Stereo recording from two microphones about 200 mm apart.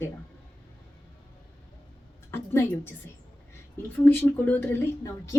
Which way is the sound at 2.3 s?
10° left (ahead or behind).